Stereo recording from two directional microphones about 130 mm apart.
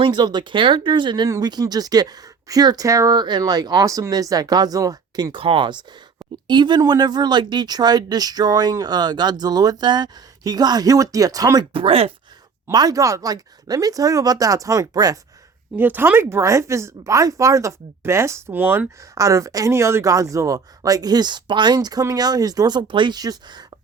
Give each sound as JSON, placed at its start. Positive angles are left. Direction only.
{"t": 0.0, "sound": "speech", "side_deg": -35}
{"t": 11.7, "sound": "speech", "side_deg": -45}
{"t": 12.7, "sound": "speech", "side_deg": -30}
{"t": 15.7, "sound": "speech", "side_deg": -15}